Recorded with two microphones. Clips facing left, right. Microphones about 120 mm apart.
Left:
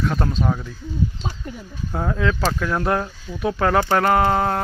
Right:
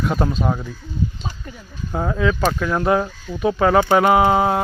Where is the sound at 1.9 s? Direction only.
5° right (ahead or behind).